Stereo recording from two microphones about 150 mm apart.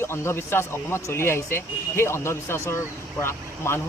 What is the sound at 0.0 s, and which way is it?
Speech, 15° left (ahead or behind).